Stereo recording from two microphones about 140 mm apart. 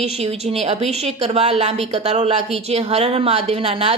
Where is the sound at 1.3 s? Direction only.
50° right (ahead or behind).